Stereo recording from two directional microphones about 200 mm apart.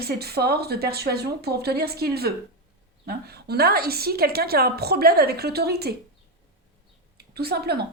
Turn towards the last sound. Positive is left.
turn(degrees=-55)  # may be behind; listen again after turning